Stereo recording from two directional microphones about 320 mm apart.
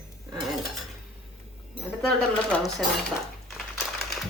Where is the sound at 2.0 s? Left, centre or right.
Centre.